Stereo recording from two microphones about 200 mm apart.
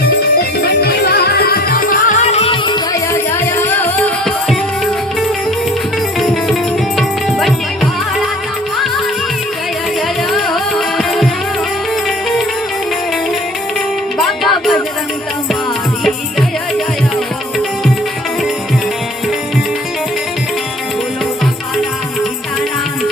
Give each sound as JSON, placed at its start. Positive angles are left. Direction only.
{"t": 0.8, "sound": "music", "side_deg": 55}
{"t": 2.3, "sound": "music", "side_deg": 30}
{"t": 6.1, "sound": "music", "side_deg": 0}
{"t": 10.3, "sound": "music", "side_deg": 0}
{"t": 14.2, "sound": "music", "side_deg": 0}